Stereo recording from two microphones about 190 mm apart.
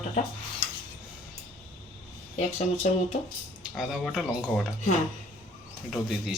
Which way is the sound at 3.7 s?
Centre (ahead or behind).